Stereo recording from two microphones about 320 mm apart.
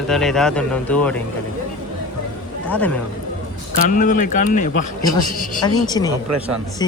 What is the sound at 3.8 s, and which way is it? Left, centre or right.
A man's voice, left.